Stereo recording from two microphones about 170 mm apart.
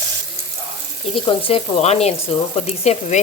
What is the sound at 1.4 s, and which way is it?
Frying, 35° left (ahead or behind).